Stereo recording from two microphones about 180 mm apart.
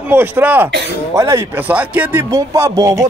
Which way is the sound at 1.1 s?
15° right (ahead or behind).